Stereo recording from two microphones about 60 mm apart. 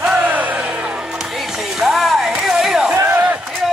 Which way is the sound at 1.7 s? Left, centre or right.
Centre.